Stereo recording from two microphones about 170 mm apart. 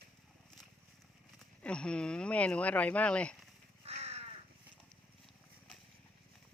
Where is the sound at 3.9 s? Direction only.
35° right (ahead or behind).